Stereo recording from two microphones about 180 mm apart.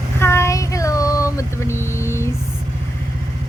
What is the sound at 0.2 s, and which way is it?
Vehicle, 15° left (ahead or behind).